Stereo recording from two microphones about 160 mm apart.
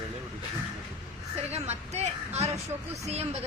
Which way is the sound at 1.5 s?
45° right (ahead or behind).